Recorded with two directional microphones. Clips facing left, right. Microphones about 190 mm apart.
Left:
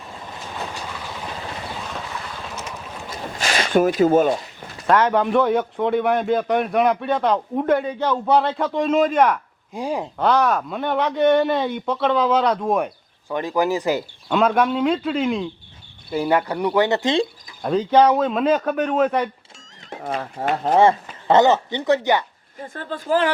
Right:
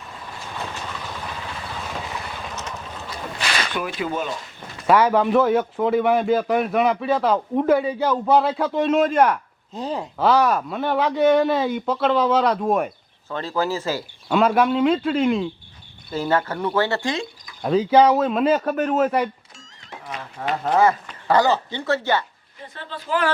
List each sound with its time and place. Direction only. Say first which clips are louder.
1.9 s vehicle: right 1 dB; 10° right (ahead or behind)
3.3 s a sound: left 8 dB; 40° left (ahead or behind)
4.9 s a man's voice: right 1 dB; 5° right (ahead or behind)
9.7 s speech: left 2 dB; 10° left (ahead or behind)
10.2 s a man's voice: right 1 dB; 5° right (ahead or behind)
13.2 s speech: left 3 dB; 15° left (ahead or behind)
14.3 s a man's voice: even; 5° right (ahead or behind)
16.1 s speech: left 2 dB; 15° left (ahead or behind)
17.6 s a man's voice: even; 5° right (ahead or behind)
20.4 s speech: left 2 dB; 35° left (ahead or behind)
20.7 s speech: left 2 dB; 25° left (ahead or behind)
22.6 s speech: left 6 dB; 50° left (ahead or behind)